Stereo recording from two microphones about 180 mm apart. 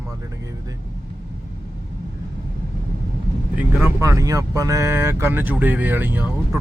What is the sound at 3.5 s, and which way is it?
Speech, 10° right (ahead or behind).